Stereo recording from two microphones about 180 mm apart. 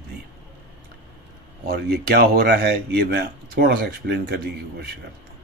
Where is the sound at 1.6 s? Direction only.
65° right (ahead or behind).